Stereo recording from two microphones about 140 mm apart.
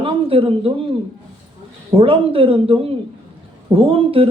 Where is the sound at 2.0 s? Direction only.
40° right (ahead or behind).